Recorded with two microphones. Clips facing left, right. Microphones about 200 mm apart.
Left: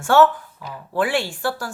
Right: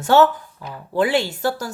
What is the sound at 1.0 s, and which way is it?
Speech, 20° right (ahead or behind).